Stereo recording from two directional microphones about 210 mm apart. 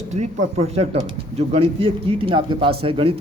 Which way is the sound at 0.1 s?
35° right (ahead or behind).